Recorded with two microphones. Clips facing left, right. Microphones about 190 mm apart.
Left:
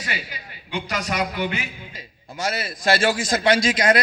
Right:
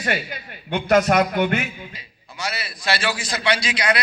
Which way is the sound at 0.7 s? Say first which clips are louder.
Right 10 dB; 55° right (ahead or behind).